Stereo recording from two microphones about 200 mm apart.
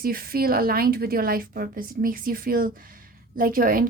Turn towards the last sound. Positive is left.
turn(degrees=-45)  # may be behind; listen again after turning